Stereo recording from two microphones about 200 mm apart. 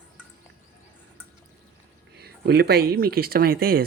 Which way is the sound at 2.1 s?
55° right (ahead or behind).